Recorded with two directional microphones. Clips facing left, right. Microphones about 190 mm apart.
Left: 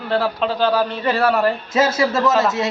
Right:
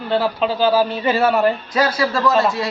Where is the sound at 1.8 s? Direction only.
20° left (ahead or behind).